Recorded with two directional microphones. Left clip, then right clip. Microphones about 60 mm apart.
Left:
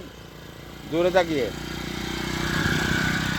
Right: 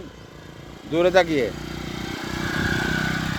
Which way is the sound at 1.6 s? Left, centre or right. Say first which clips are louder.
Even; left.